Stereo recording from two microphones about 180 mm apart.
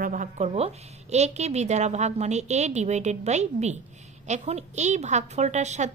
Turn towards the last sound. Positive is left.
turn(degrees=-40)  # may be behind; listen again after turning